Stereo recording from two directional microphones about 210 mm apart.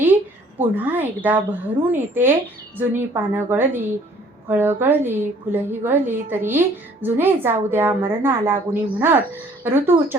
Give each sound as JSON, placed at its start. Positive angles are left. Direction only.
{"t": 0.6, "sound": "a woman's voice", "side_deg": -10}